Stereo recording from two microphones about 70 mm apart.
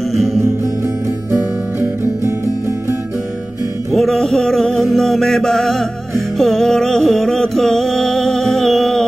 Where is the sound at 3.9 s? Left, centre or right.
Centre.